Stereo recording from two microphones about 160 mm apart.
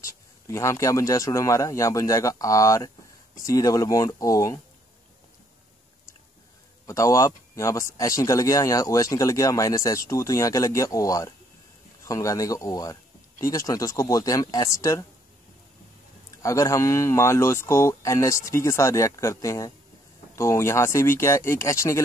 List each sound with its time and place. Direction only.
0.0 s speech: 20° left (ahead or behind)
6.9 s speech: 20° left (ahead or behind)
16.4 s speech: 20° left (ahead or behind)